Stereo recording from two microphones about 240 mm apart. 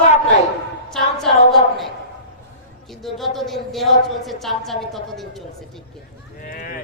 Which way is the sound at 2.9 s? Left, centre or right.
Centre.